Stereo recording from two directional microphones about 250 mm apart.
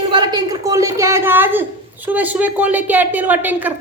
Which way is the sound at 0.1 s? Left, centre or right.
Centre.